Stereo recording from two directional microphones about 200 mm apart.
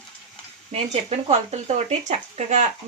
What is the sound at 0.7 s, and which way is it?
Speech, 30° right (ahead or behind).